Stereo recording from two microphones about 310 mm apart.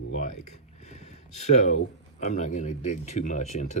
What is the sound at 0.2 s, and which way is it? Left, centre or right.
Speech, left.